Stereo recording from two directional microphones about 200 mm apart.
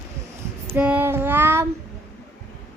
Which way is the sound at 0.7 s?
5° right (ahead or behind).